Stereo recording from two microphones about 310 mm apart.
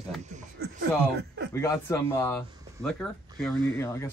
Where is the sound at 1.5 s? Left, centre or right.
Centre.